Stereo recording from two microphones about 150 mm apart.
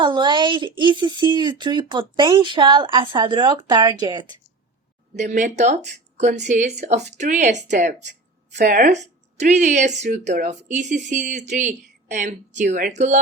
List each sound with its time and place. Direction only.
0.0 s speech: 30° right (ahead or behind)
5.1 s speech: 55° right (ahead or behind)
8.6 s speech: 90° right
9.4 s speech: 50° right (ahead or behind)